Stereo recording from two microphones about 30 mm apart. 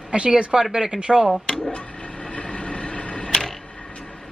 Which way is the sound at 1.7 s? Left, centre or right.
Left.